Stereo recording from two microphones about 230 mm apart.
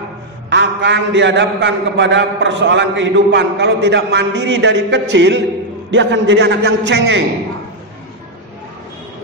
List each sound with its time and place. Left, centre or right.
0.5 s a man's voice: right